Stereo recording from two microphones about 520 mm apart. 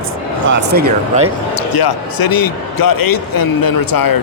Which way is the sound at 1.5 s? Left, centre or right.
Left.